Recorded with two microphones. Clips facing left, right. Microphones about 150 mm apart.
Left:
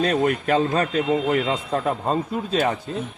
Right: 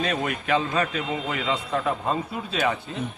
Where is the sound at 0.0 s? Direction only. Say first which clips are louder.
Left 6 dB; 40° left (ahead or behind).